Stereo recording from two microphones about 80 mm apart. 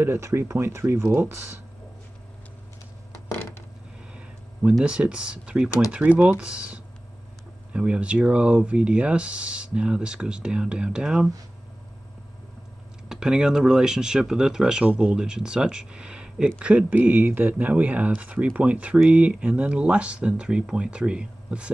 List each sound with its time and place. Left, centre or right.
0.0 s speech: right
3.1 s a sound: left
4.8 s speech: centre
13.1 s speech: centre